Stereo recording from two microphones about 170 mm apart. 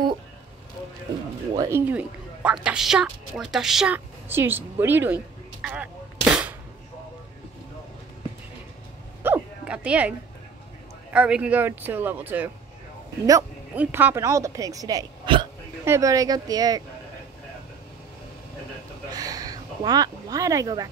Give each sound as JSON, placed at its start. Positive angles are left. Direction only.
{"t": 1.5, "sound": "speech", "side_deg": -20}
{"t": 1.9, "sound": "a woman's voice", "side_deg": -5}
{"t": 9.2, "sound": "a sound", "side_deg": -10}
{"t": 11.1, "sound": "speech", "side_deg": -5}
{"t": 13.7, "sound": "speech", "side_deg": -10}
{"t": 19.0, "sound": "a sound", "side_deg": -20}